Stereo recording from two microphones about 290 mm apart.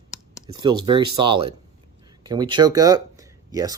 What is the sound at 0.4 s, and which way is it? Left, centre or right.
Speech, centre.